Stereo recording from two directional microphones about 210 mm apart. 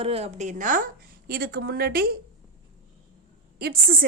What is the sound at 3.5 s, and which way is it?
Speech, 45° right (ahead or behind).